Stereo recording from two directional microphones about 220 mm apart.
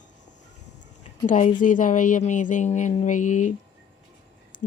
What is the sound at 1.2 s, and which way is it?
Speech, 35° left (ahead or behind).